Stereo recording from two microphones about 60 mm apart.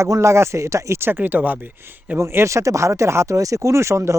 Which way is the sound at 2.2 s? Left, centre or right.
Right.